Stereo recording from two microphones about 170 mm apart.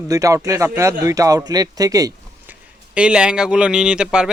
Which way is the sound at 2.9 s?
5° right (ahead or behind).